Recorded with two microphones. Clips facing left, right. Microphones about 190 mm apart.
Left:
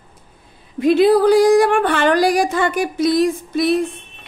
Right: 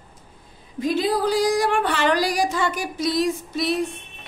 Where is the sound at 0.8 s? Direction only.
65° left (ahead or behind).